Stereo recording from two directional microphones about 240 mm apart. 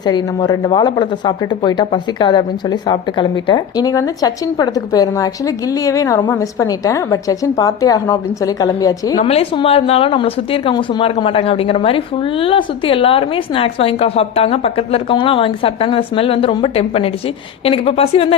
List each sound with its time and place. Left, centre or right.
0.0 s speech: centre